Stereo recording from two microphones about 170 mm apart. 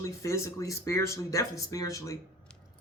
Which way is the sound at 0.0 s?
20° left (ahead or behind).